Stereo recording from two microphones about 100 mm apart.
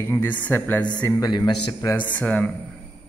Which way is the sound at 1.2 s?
40° left (ahead or behind).